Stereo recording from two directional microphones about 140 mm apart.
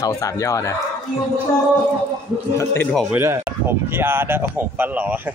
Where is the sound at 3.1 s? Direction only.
15° right (ahead or behind).